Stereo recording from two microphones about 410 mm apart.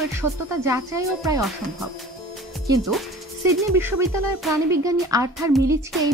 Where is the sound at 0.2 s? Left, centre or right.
Centre.